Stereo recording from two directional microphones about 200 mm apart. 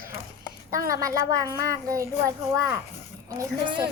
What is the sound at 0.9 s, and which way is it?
A child's voice, 15° right (ahead or behind).